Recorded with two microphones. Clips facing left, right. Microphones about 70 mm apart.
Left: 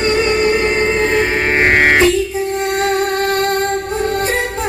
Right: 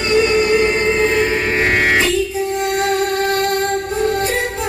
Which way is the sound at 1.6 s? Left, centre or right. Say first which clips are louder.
Left 4 dB; left.